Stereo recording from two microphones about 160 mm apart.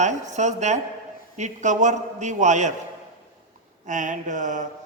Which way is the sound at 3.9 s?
50° right (ahead or behind).